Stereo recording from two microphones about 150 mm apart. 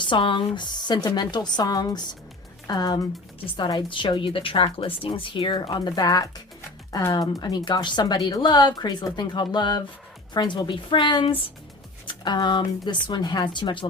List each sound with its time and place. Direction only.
0.0 s a woman's voice: 35° left (ahead or behind)